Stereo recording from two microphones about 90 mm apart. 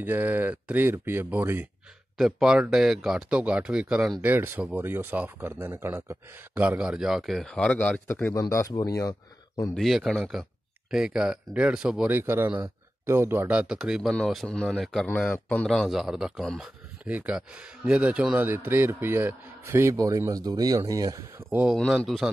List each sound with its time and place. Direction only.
0.0 s a man's voice: 20° right (ahead or behind)
2.1 s speech: 5° right (ahead or behind)
4.2 s a man's voice: 25° right (ahead or behind); by 7.5 s centre (ahead or behind)
7.5 s speech: 15° left (ahead or behind)
8.3 s speech: 35° left (ahead or behind)
9.8 s a man's voice: centre (ahead or behind)
12.1 s a man's voice: 25° right (ahead or behind)
13.5 s a man's voice: 10° right (ahead or behind)
17.0 s a man's voice: 15° right (ahead or behind); by 21.5 s 40° right (ahead or behind)
22.0 s a man's voice: centre (ahead or behind)